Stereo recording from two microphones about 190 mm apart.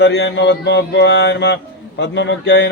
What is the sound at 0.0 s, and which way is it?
Mantra, 60° left (ahead or behind).